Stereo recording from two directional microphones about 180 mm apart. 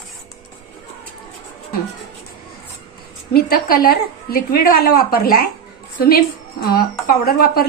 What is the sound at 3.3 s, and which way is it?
A woman's voice, 55° left (ahead or behind).